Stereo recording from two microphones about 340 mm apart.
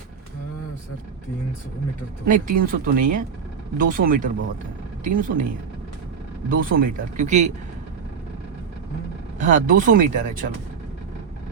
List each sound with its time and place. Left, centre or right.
2.2 s speech: right
6.5 s speech: right
9.4 s speech: right